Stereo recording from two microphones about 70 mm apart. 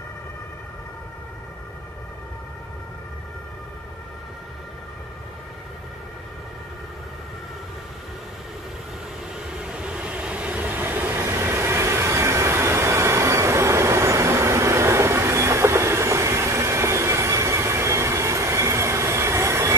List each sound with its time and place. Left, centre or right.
9.3 s vehicle: centre; by 19.7 s right